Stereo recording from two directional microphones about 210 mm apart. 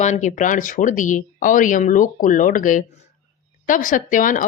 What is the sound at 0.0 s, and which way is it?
Speech, 35° left (ahead or behind).